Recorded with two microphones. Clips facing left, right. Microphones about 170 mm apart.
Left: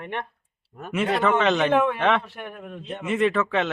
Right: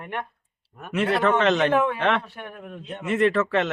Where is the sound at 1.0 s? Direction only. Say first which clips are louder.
Right 1 dB; centre (ahead or behind).